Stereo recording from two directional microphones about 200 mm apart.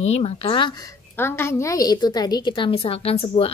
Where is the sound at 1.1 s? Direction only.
10° left (ahead or behind).